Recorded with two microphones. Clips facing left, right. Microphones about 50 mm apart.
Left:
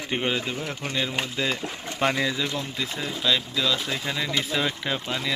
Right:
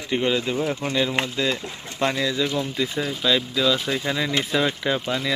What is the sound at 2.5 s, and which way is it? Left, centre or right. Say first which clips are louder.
Speech: right 5 dB; centre.